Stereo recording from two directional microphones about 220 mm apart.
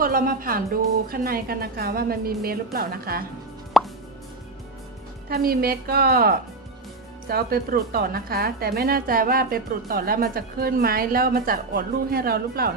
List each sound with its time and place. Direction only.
0.0 s a woman's voice: 40° right (ahead or behind)
3.8 s plop: centre (ahead or behind)
5.3 s a woman's voice: 45° right (ahead or behind)